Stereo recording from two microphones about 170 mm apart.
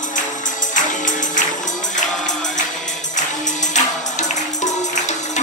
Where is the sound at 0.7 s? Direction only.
45° left (ahead or behind).